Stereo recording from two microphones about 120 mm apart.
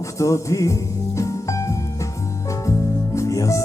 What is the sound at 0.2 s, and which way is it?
Music, 25° left (ahead or behind).